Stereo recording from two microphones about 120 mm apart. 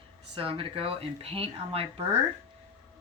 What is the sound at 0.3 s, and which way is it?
Speech, 50° right (ahead or behind).